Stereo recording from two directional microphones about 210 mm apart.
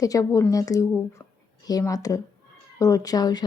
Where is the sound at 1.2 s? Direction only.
10° left (ahead or behind).